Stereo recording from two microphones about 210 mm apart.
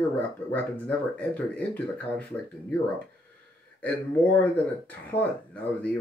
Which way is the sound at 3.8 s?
5° left (ahead or behind).